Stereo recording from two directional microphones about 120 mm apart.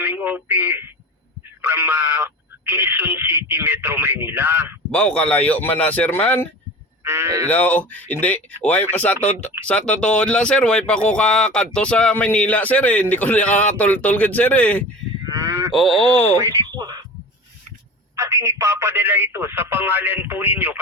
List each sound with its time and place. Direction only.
0.0 s a man's voice: 15° right (ahead or behind)
4.9 s a man's voice: 10° left (ahead or behind)
7.0 s cattle: 20° right (ahead or behind)
7.4 s a man's voice: 15° left (ahead or behind)
15.3 s cattle: 30° right (ahead or behind)
15.7 s speech: centre (ahead or behind)
16.0 s speech: 55° left (ahead or behind)
16.4 s speech: 30° right (ahead or behind)
18.2 s speech: 25° right (ahead or behind)